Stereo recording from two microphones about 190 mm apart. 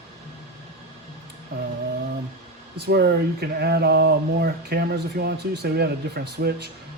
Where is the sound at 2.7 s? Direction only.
55° right (ahead or behind).